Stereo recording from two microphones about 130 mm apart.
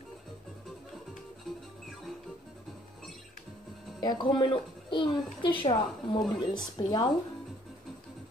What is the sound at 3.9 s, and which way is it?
A child's voice, 35° left (ahead or behind).